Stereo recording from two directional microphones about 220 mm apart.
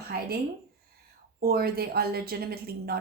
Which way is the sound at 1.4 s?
45° right (ahead or behind).